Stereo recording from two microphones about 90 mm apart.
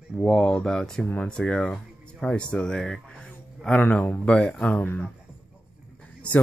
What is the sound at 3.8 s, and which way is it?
Speech, 15° left (ahead or behind).